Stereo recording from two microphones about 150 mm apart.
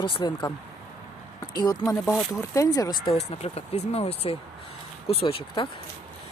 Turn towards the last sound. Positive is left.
turn(degrees=35)  # may be behind; listen again after turning